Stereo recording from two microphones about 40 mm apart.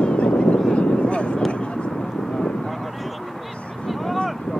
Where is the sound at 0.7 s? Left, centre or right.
Left.